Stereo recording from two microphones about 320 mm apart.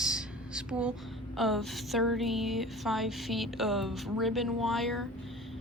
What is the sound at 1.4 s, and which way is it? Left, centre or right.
A woman's voice, centre.